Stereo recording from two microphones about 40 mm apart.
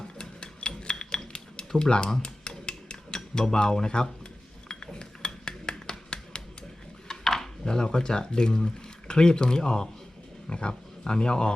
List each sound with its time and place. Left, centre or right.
0.2 s music: left
0.8 s cutlery: centre
2.2 s music: left
3.2 s speech: centre
4.7 s cutlery: centre
7.1 s speech: centre